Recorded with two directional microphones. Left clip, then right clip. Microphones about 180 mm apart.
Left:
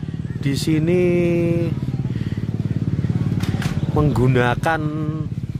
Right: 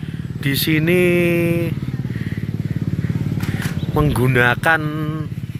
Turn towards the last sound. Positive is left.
turn(degrees=10)  # may be behind; listen again after turning